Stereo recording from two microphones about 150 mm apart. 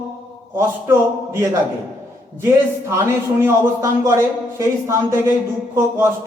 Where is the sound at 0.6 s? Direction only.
20° right (ahead or behind).